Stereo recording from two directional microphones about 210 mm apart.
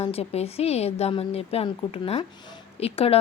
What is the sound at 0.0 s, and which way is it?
Speech, 30° left (ahead or behind).